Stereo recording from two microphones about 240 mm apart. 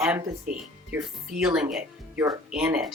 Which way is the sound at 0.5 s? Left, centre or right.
Right.